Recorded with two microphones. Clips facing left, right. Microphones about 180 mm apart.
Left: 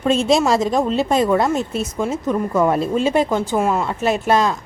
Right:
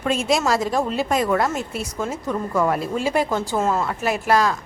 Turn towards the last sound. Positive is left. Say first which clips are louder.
# left 2 dB
turn(degrees=25)  # may be behind; listen again after turning